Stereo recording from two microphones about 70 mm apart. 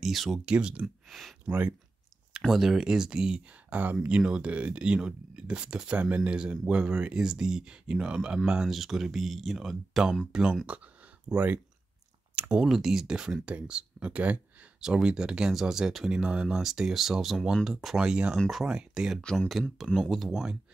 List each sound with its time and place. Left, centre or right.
0.0 s speech: centre
0.5 s speech: centre
1.0 s a sound: centre
1.4 s speech: centre
2.3 s speech: centre
8.6 s speech: centre
10.7 s speech: centre
12.6 s speech: centre; by 14.7 s right
14.8 s speech: centre
19.3 s speech: centre